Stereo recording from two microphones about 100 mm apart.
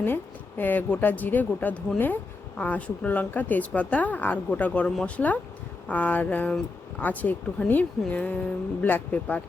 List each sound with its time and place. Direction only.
0.0 s a woman's voice: 20° left (ahead or behind)